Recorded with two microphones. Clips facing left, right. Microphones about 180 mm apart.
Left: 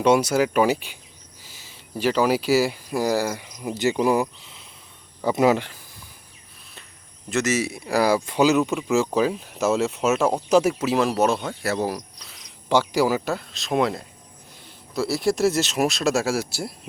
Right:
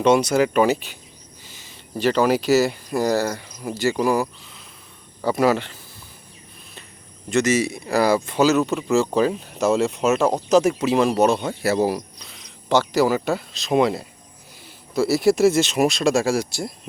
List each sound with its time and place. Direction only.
0.0 s speech: 10° left (ahead or behind)
7.3 s speech: 5° left (ahead or behind)
12.2 s speech: 5° left (ahead or behind)